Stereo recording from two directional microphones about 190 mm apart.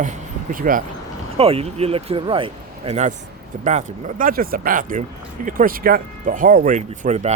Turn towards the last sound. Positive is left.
turn(degrees=-35)  # may be behind; listen again after turning